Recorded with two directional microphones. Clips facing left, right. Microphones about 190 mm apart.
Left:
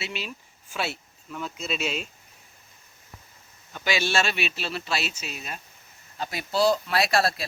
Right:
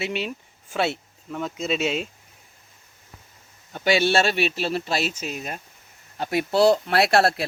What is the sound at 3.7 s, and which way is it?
Speech, 50° right (ahead or behind).